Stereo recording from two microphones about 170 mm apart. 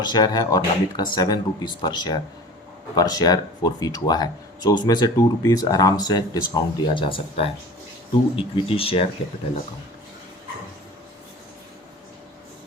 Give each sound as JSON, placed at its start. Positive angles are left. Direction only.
{"t": 0.0, "sound": "speech", "side_deg": 25}